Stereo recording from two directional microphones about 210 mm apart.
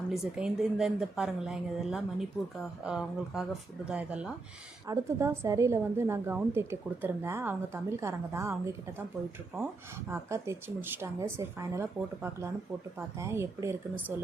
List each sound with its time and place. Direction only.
0.1 s a woman's voice: 5° right (ahead or behind)
10.1 s a woman's voice: 15° right (ahead or behind)